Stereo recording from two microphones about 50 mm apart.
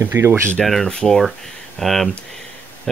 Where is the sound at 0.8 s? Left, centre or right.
Centre.